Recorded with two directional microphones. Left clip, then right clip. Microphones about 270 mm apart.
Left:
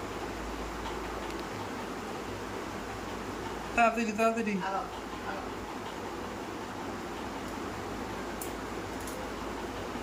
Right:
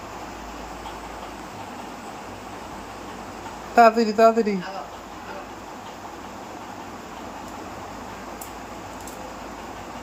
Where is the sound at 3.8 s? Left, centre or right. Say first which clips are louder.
Right 12 dB; centre.